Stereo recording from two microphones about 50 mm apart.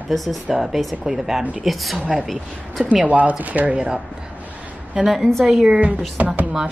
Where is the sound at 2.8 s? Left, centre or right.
Right.